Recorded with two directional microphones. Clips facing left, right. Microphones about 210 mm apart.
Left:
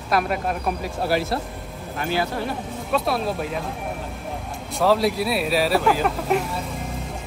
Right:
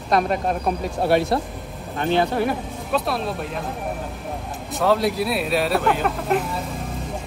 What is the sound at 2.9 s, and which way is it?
Speech, centre (ahead or behind).